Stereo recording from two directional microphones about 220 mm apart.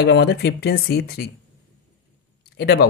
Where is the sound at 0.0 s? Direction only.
50° left (ahead or behind).